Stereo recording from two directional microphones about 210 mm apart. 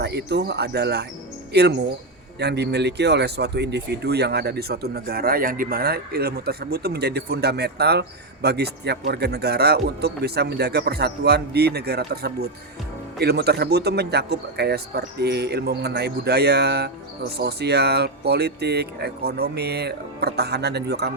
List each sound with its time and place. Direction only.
0.0 s speech: 55° right (ahead or behind)